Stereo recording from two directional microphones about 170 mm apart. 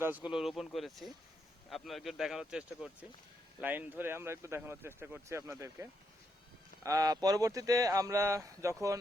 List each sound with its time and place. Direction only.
0.0 s speech: 10° right (ahead or behind)